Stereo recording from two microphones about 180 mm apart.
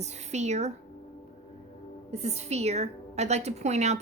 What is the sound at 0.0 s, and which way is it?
Speech, 40° right (ahead or behind).